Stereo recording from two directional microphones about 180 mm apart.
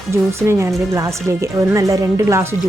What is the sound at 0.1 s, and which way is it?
Speech, 15° right (ahead or behind).